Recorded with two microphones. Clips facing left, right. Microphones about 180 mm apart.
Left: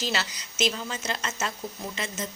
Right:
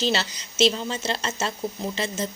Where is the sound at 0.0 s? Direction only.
30° right (ahead or behind).